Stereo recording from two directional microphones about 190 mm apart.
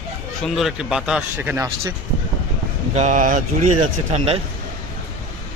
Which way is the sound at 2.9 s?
40° right (ahead or behind).